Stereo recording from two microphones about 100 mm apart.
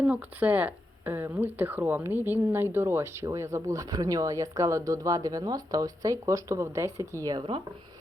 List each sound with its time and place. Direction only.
0.0 s speech: 15° right (ahead or behind)